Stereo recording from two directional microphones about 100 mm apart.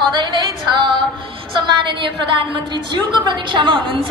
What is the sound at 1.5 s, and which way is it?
A woman's voice, 55° right (ahead or behind).